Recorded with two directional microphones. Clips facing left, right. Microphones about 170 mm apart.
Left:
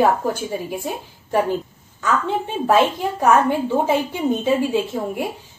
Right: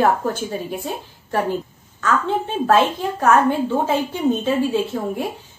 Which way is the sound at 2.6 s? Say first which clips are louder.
Even; 15° left (ahead or behind).